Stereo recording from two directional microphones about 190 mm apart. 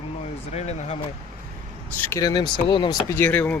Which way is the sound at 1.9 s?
10° left (ahead or behind).